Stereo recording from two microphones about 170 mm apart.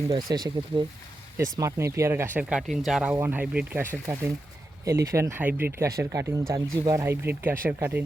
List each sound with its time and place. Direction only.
0.1 s speech: 25° right (ahead or behind)